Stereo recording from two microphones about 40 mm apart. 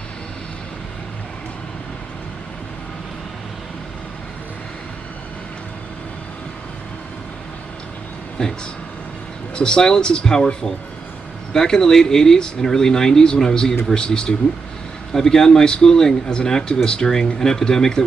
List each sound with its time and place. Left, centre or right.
8.4 s speech: centre
9.6 s speech: centre